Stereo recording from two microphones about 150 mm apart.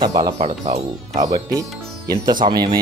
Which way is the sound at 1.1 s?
25° right (ahead or behind).